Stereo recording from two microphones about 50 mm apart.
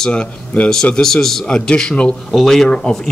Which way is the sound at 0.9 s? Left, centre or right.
Centre.